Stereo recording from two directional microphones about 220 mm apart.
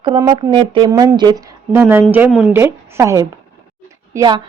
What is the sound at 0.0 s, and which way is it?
A woman's voice, 20° right (ahead or behind).